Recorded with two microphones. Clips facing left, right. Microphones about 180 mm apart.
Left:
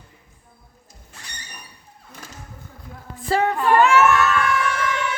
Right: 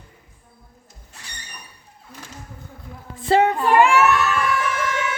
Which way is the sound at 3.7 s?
10° right (ahead or behind).